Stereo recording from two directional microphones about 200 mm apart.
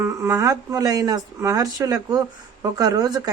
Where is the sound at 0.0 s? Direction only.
15° right (ahead or behind).